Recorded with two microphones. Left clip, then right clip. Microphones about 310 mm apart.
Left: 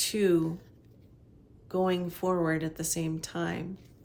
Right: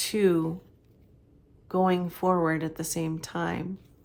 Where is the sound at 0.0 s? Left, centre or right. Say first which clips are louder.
Right 2 dB; centre.